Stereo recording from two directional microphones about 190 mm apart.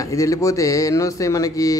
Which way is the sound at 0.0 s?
15° left (ahead or behind).